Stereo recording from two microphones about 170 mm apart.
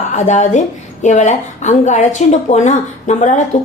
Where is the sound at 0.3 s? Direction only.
45° left (ahead or behind).